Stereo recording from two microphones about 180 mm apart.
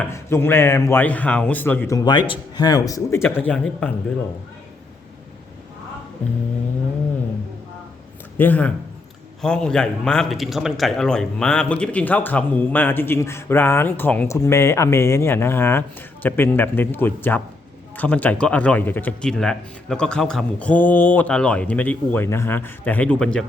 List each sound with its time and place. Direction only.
0.1 s a man's voice: 15° left (ahead or behind)
8.4 s a man's voice: 10° left (ahead or behind)